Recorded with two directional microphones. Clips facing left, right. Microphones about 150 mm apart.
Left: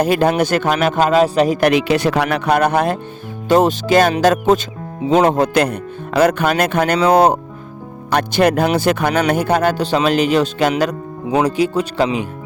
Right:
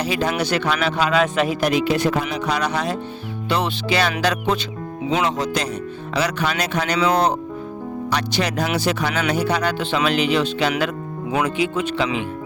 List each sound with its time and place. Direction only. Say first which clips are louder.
0.0 s speech: left 7 dB; 50° left (ahead or behind)
1.6 s speech: left 4 dB; 75° left (ahead or behind); by 12.3 s 40° left (ahead or behind)